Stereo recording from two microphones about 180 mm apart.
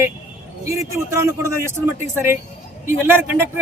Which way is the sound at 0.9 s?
15° right (ahead or behind).